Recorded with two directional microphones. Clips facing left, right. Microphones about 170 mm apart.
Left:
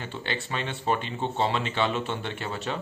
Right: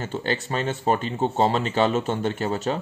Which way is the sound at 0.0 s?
40° right (ahead or behind).